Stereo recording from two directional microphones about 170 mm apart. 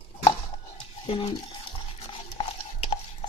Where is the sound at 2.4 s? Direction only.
35° left (ahead or behind).